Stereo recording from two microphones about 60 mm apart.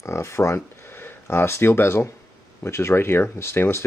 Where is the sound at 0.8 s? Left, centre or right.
Left.